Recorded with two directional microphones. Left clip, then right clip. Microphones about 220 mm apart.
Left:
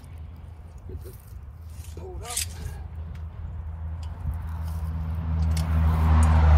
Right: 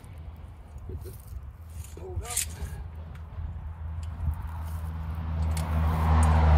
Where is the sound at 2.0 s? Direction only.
Centre (ahead or behind).